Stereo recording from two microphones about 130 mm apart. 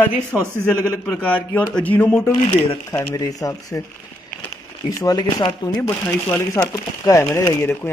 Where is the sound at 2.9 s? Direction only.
25° left (ahead or behind).